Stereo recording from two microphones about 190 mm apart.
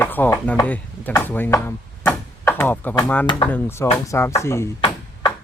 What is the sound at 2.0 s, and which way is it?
Door, 10° left (ahead or behind).